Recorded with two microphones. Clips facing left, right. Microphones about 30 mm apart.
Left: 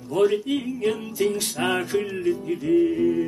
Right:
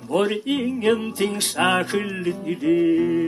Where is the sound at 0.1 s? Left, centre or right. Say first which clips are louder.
Even; right.